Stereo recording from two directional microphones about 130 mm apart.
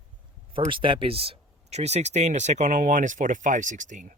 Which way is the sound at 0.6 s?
40° right (ahead or behind).